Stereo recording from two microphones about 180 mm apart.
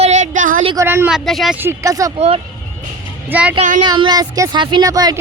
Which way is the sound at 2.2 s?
35° right (ahead or behind).